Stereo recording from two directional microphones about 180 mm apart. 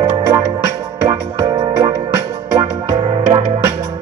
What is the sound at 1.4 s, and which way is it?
Music, 25° right (ahead or behind).